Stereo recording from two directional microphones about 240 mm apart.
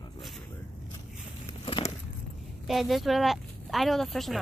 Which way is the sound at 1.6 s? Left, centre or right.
Left.